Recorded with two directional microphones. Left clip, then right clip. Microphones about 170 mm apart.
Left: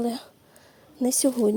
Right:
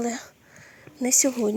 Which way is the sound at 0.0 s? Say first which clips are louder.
Even; 15° left (ahead or behind).